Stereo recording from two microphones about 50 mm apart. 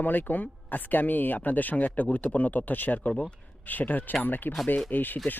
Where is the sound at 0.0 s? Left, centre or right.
Left.